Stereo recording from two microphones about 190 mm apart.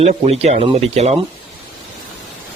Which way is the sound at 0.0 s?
35° right (ahead or behind).